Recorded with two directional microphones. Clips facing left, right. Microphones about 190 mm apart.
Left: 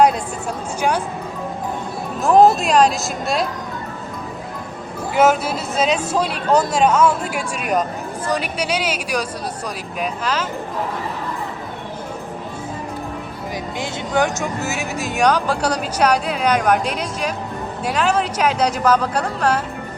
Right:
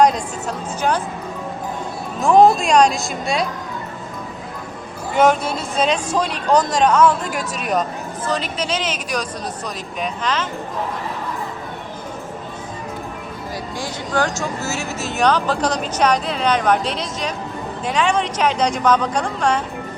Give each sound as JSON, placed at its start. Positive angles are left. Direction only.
{"t": 0.8, "sound": "speech", "side_deg": 10}
{"t": 2.2, "sound": "speech", "side_deg": 0}
{"t": 5.1, "sound": "speech", "side_deg": 5}
{"t": 13.7, "sound": "speech", "side_deg": 20}